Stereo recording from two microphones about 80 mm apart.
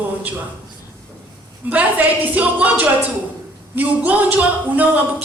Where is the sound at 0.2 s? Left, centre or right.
Right.